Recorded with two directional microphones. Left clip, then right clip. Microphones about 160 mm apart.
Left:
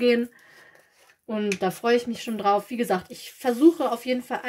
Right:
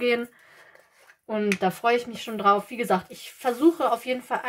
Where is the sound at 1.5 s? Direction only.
50° left (ahead or behind).